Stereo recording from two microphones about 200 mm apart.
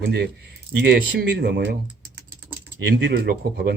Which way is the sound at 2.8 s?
55° right (ahead or behind).